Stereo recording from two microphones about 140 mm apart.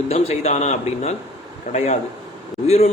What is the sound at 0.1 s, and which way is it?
A man's voice, 50° left (ahead or behind).